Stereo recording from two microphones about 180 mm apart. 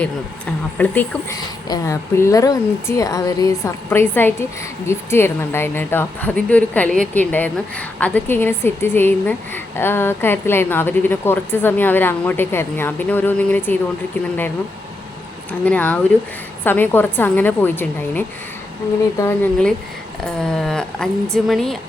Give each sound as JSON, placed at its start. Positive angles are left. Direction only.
{"t": 0.8, "sound": "a woman's voice", "side_deg": 10}
{"t": 1.6, "sound": "a woman's voice", "side_deg": 20}
{"t": 15.6, "sound": "a woman's voice", "side_deg": 10}